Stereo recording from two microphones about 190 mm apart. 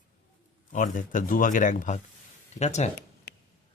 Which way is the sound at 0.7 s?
40° left (ahead or behind).